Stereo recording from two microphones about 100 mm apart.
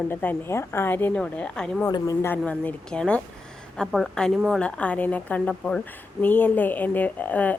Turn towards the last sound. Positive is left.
turn(degrees=15)  # may be behind; listen again after turning